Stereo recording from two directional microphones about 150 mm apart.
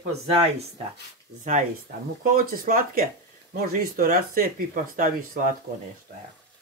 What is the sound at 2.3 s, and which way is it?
Speech, 70° right (ahead or behind).